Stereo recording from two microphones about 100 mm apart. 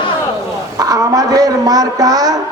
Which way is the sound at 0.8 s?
40° right (ahead or behind).